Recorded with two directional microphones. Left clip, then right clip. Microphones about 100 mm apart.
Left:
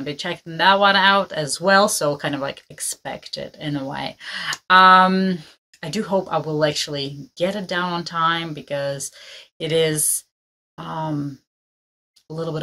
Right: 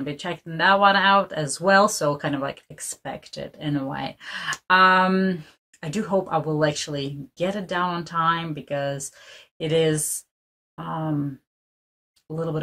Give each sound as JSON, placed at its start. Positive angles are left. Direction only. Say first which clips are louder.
{"t": 0.0, "sound": "speech", "louder": "left 3 dB", "side_deg": 25}